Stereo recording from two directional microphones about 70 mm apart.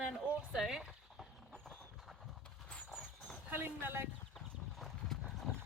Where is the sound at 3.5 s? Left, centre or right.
Right.